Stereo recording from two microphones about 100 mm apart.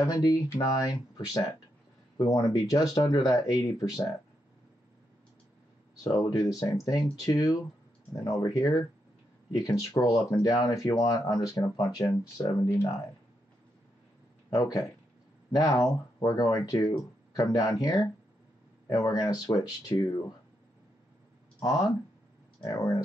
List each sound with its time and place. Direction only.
0.0 s speech: 40° left (ahead or behind)
6.1 s speech: 35° left (ahead or behind)
14.5 s speech: 35° left (ahead or behind)
21.5 s speech: 40° left (ahead or behind)